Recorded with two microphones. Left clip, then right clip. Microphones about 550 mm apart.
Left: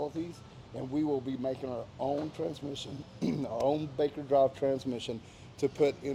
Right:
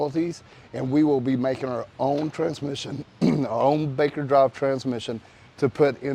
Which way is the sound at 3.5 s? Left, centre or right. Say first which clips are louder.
Right 8 dB; right.